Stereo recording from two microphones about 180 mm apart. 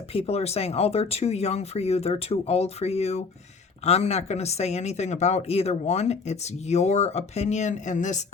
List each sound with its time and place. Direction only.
0.1 s speech: 35° left (ahead or behind)